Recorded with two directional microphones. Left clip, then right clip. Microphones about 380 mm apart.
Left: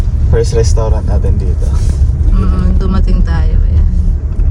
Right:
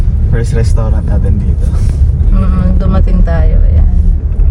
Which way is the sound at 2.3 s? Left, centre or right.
Centre.